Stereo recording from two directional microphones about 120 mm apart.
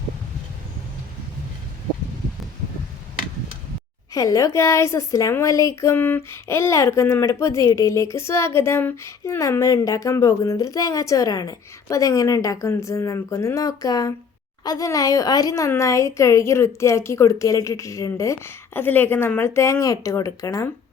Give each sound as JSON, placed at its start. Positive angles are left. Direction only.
{"t": 4.1, "sound": "a woman's voice", "side_deg": 25}